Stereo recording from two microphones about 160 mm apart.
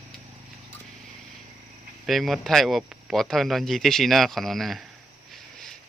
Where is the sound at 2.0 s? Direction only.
Centre (ahead or behind).